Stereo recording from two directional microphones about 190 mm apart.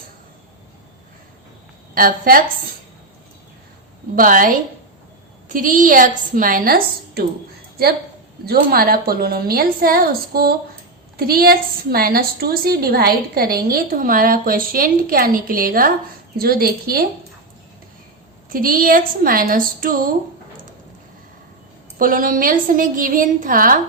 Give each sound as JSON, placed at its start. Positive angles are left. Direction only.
{"t": 2.0, "sound": "a woman's voice", "side_deg": -50}
{"t": 4.1, "sound": "a woman's voice", "side_deg": -45}
{"t": 8.4, "sound": "a woman's voice", "side_deg": -50}
{"t": 18.4, "sound": "a woman's voice", "side_deg": -45}
{"t": 21.9, "sound": "a woman's voice", "side_deg": -45}